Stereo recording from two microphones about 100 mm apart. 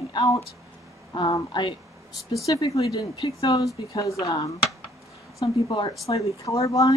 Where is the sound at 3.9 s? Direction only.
35° left (ahead or behind).